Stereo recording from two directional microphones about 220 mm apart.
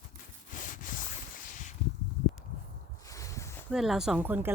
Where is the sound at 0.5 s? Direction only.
35° left (ahead or behind).